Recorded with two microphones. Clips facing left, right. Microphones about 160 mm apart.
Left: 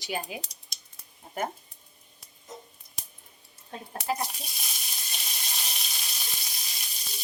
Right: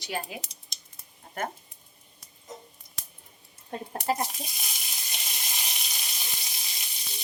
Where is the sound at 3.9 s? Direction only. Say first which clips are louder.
Right 2 dB; 40° right (ahead or behind).